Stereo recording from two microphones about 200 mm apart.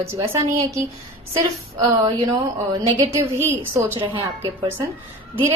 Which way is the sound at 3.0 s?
15° right (ahead or behind).